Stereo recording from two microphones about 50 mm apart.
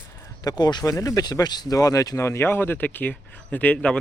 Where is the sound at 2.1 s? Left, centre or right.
Left.